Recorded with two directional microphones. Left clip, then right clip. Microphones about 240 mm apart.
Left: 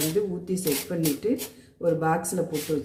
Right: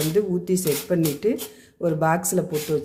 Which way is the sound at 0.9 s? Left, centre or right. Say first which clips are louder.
Right 4 dB; right.